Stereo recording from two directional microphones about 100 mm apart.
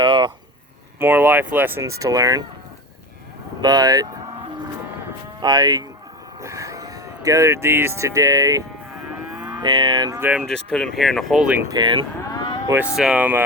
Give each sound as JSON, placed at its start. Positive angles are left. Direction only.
{"t": 0.0, "sound": "a sound", "side_deg": -50}
{"t": 0.9, "sound": "speech", "side_deg": -20}
{"t": 1.8, "sound": "speech", "side_deg": -35}
{"t": 3.6, "sound": "speech", "side_deg": -40}
{"t": 5.4, "sound": "cattle", "side_deg": -45}
{"t": 6.4, "sound": "speech", "side_deg": -35}
{"t": 9.0, "sound": "livestock", "side_deg": -15}
{"t": 9.6, "sound": "cattle", "side_deg": -45}
{"t": 10.2, "sound": "speech", "side_deg": -20}
{"t": 10.4, "sound": "speech", "side_deg": 5}
{"t": 11.7, "sound": "cattle", "side_deg": -50}
{"t": 12.3, "sound": "vehicle", "side_deg": 50}
{"t": 13.0, "sound": "speech", "side_deg": -10}